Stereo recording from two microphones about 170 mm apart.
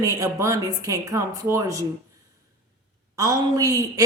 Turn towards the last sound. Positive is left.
turn(degrees=-20)  # may be behind; listen again after turning